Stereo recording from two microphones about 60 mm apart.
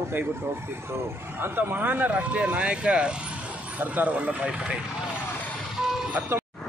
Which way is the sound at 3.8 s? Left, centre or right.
Right.